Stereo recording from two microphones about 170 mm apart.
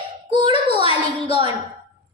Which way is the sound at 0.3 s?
30° right (ahead or behind).